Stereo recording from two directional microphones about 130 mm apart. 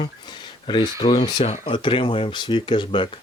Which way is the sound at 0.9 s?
60° left (ahead or behind).